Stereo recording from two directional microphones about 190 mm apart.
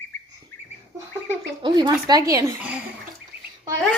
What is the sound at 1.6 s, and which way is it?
Speech, 25° right (ahead or behind).